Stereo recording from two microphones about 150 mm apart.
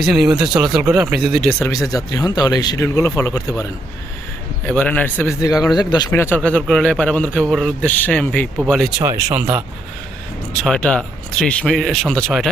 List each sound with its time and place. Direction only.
0.0 s speech: 5° right (ahead or behind)
0.8 s speech: 20° right (ahead or behind)
1.1 s speech: centre (ahead or behind)
1.7 s speech: 25° left (ahead or behind)
4.6 s speech: 10° left (ahead or behind)
5.4 s speech: 25° left (ahead or behind)
6.1 s speech: 15° left (ahead or behind)
9.0 s speech: 15° right (ahead or behind)
10.6 s speech: 5° left (ahead or behind)